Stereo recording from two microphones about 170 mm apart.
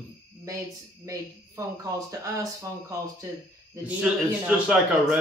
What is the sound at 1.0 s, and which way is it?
Speech, 20° right (ahead or behind).